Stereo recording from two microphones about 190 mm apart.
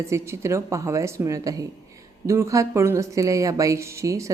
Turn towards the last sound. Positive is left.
turn(degrees=-15)  # may be behind; listen again after turning